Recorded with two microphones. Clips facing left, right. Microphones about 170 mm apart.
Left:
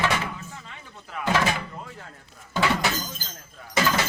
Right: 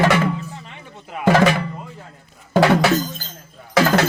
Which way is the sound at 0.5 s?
20° right (ahead or behind).